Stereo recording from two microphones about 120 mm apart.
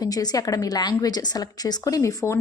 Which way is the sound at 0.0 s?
35° left (ahead or behind).